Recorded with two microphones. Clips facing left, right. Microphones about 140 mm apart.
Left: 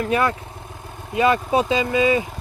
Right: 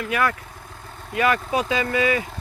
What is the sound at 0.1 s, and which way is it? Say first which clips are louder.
Speech: left 3 dB; 25° left (ahead or behind).